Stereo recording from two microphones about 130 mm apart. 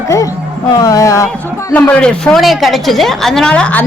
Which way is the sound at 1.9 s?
10° left (ahead or behind).